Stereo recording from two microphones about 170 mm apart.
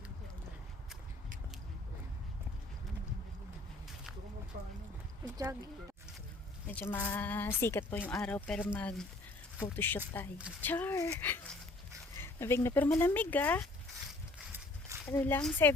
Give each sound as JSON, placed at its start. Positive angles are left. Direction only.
{"t": 5.4, "sound": "speech", "side_deg": -20}
{"t": 6.9, "sound": "speech", "side_deg": 10}
{"t": 15.1, "sound": "speech", "side_deg": 10}